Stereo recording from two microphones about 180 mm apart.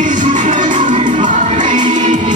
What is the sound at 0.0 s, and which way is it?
Music, 45° right (ahead or behind).